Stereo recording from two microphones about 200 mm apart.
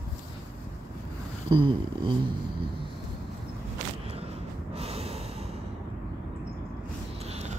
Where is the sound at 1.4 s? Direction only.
25° right (ahead or behind).